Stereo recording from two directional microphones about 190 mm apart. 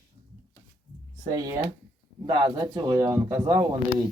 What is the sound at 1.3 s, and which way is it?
Speech, 20° right (ahead or behind).